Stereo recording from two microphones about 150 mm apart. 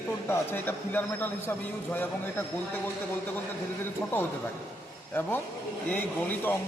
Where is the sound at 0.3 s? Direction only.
15° left (ahead or behind).